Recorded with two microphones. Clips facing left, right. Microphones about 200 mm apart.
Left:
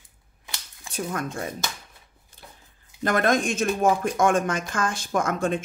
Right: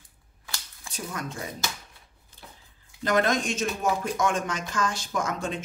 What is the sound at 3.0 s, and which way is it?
Speech, 55° left (ahead or behind).